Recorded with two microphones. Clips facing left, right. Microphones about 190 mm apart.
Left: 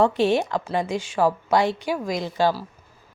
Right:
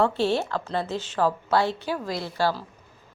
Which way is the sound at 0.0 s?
15° left (ahead or behind).